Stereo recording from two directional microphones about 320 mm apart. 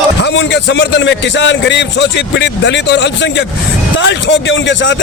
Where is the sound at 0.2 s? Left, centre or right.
Left.